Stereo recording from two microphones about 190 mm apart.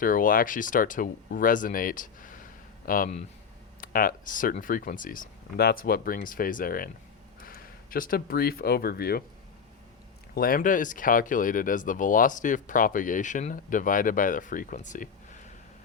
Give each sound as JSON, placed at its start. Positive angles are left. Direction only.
{"t": 0.0, "sound": "speech", "side_deg": 45}
{"t": 10.3, "sound": "speech", "side_deg": 50}